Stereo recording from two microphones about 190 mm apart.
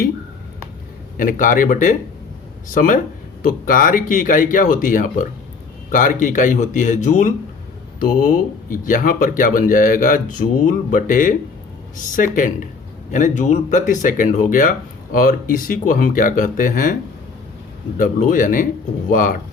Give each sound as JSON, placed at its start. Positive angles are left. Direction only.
{"t": 1.1, "sound": "speech", "side_deg": 45}
{"t": 17.9, "sound": "speech", "side_deg": 45}